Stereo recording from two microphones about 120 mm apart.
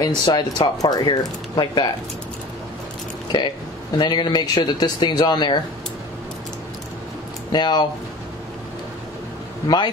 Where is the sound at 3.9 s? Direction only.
40° left (ahead or behind).